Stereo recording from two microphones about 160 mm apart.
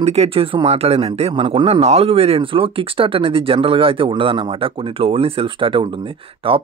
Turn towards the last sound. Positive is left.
turn(degrees=-35)  # may be behind; listen again after turning